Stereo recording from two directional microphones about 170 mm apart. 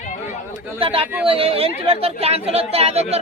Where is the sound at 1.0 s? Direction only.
10° right (ahead or behind).